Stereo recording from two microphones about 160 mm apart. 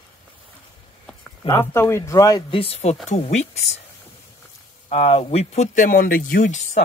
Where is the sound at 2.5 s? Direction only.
35° left (ahead or behind).